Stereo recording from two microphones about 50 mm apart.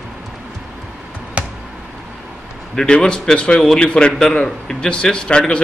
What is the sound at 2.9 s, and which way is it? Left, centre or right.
Speech, centre.